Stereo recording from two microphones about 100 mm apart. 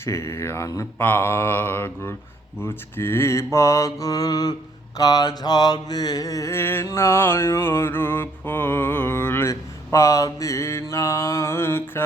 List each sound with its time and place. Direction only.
0.0 s mantra: 30° left (ahead or behind)